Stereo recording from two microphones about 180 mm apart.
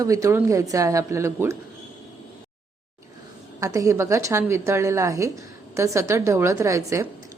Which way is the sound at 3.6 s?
15° right (ahead or behind).